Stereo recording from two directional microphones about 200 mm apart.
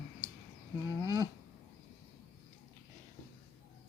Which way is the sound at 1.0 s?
15° right (ahead or behind).